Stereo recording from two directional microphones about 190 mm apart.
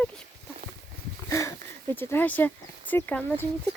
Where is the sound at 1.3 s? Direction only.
15° left (ahead or behind).